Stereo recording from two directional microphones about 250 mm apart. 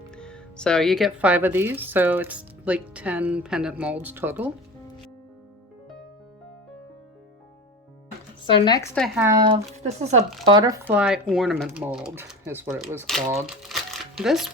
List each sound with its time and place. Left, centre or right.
0.2 s speech: centre
8.4 s speech: centre
9.0 s speech: centre
9.2 s speech: centre
9.8 s speech: right
10.4 s speech: centre